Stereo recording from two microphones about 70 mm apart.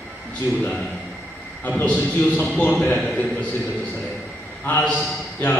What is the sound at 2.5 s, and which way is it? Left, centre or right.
Speech, centre.